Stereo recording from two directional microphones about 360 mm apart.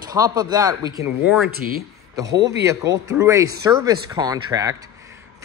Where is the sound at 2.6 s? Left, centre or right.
Centre.